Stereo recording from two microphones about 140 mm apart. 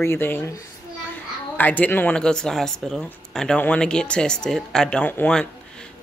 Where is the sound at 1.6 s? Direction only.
10° left (ahead or behind).